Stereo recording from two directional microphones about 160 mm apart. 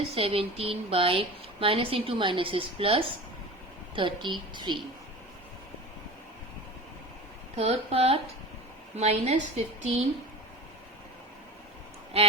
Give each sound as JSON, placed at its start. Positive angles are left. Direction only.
{"t": 0.0, "sound": "a woman's voice", "side_deg": -35}
{"t": 7.5, "sound": "a woman's voice", "side_deg": -45}